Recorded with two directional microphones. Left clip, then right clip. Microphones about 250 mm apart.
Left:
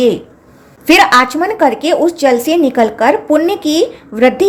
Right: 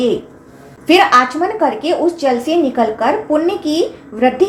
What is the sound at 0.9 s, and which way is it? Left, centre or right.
A woman's voice, left.